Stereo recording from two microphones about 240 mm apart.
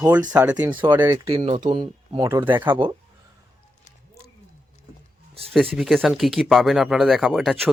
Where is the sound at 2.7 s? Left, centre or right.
Right.